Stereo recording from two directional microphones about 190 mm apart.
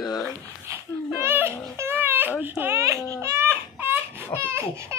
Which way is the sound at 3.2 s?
15° right (ahead or behind).